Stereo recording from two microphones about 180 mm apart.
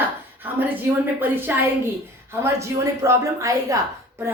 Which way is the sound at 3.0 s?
15° right (ahead or behind).